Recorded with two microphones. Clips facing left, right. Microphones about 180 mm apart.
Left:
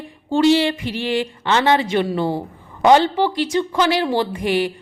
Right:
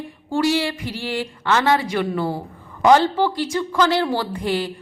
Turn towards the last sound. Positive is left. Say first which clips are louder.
# left 4 dB
turn(degrees=15)  # may be behind; listen again after turning